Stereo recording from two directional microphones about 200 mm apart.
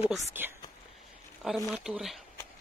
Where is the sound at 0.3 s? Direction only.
10° right (ahead or behind).